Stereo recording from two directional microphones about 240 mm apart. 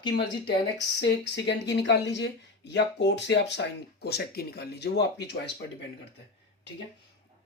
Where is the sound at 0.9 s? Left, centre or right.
Left.